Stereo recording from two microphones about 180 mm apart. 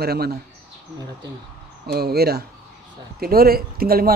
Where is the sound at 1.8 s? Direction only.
60° right (ahead or behind).